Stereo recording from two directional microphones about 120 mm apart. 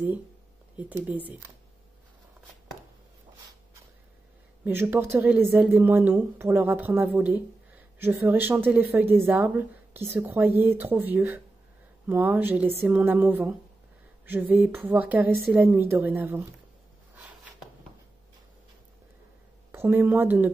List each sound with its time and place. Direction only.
0.7 s speech: 15° right (ahead or behind)
4.6 s speech: 20° right (ahead or behind)
14.6 s speech: 15° right (ahead or behind)
19.7 s speech: 20° right (ahead or behind)